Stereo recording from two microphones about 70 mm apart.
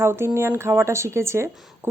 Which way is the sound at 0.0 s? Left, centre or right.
Right.